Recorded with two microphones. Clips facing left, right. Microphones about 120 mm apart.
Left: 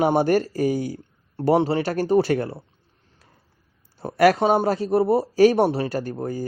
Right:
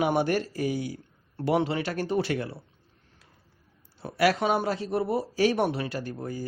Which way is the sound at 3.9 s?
45° left (ahead or behind).